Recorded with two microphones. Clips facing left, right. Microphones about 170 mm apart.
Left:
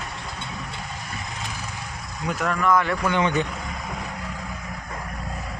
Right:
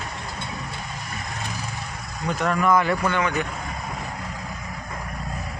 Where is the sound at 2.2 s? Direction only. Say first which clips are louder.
Right 1 dB; centre (ahead or behind).